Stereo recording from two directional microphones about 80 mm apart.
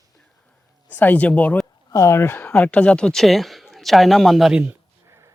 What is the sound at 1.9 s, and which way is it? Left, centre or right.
Speech, left.